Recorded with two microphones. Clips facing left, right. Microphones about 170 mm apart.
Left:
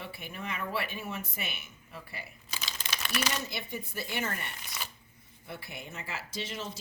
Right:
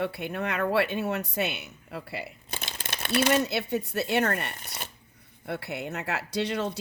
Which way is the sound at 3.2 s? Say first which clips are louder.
Right 11 dB; 65° right (ahead or behind).